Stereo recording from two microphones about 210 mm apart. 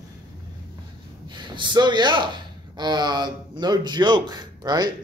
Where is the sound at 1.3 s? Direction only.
20° right (ahead or behind).